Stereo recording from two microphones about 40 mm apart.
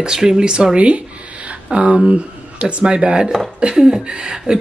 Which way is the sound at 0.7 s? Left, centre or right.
Right.